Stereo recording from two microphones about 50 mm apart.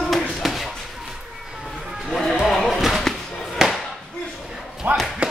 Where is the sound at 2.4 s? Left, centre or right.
Centre.